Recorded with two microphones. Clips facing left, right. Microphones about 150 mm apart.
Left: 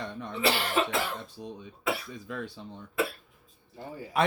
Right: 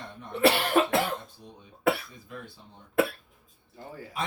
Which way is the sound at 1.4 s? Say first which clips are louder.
Left 8 dB; 90° left.